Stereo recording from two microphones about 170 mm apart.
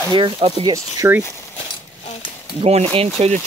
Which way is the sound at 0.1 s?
30° right (ahead or behind).